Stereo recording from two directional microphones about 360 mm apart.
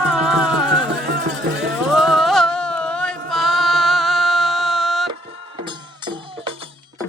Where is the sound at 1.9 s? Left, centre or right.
Centre.